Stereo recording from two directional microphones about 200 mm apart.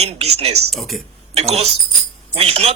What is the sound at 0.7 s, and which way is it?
Speech, centre (ahead or behind).